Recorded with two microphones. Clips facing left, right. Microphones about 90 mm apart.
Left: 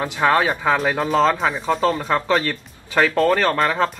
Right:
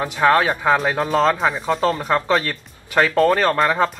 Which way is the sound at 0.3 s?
5° left (ahead or behind).